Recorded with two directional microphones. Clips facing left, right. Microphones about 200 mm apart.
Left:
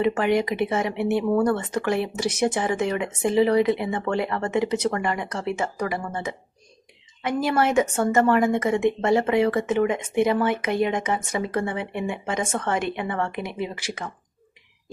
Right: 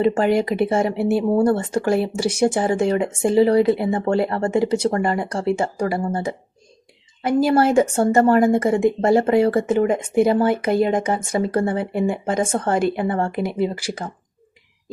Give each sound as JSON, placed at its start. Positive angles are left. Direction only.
{"t": 0.0, "sound": "speech", "side_deg": -30}